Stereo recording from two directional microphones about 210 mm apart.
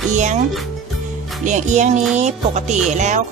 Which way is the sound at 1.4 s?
35° right (ahead or behind).